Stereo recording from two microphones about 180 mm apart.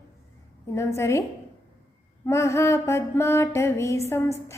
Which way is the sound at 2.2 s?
15° left (ahead or behind).